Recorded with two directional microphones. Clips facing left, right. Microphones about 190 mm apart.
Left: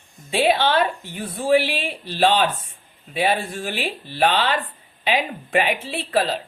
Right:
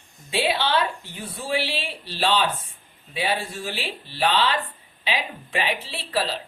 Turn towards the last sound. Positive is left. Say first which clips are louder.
# left 5 dB
turn(degrees=50)  # may be behind; listen again after turning